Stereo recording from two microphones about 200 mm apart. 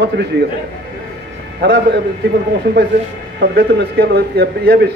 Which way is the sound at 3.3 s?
55° right (ahead or behind).